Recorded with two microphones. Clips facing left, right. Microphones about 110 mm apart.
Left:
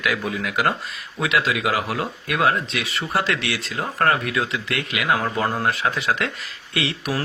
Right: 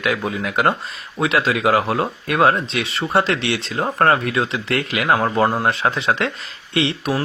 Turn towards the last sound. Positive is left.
turn(degrees=-25)  # may be behind; listen again after turning